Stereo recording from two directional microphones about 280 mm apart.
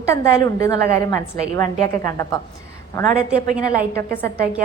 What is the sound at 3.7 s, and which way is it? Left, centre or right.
Speech, right.